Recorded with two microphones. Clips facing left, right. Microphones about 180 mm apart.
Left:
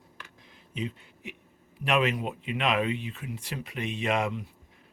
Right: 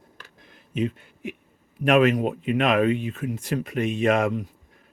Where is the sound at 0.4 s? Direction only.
55° right (ahead or behind).